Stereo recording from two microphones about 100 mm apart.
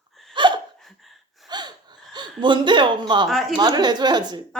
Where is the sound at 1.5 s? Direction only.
45° right (ahead or behind).